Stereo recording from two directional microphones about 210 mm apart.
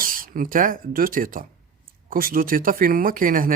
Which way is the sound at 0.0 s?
40° right (ahead or behind).